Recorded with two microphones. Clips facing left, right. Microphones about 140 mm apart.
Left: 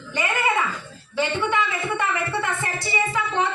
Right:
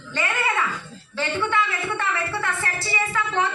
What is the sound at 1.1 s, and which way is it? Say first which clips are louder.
Music: left 1 dB; 15° left (ahead or behind).